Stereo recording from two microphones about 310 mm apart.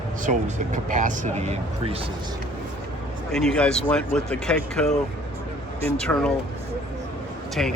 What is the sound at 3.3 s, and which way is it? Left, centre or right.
Speech, centre.